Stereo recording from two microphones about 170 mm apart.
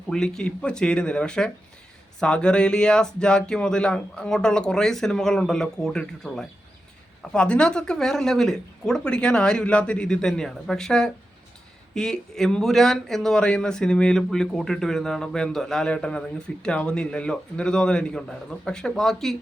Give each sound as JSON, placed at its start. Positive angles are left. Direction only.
{"t": 0.1, "sound": "speech", "side_deg": 5}